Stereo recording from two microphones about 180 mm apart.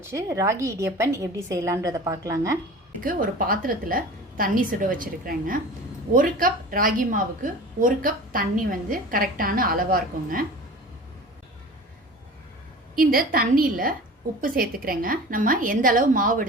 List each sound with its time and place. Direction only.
0.0 s a woman's voice: 15° right (ahead or behind)
3.0 s a woman's voice: 50° right (ahead or behind)
13.0 s a woman's voice: 55° right (ahead or behind)